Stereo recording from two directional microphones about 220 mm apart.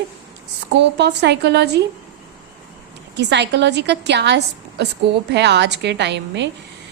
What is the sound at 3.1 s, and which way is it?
A woman's voice, 50° right (ahead or behind).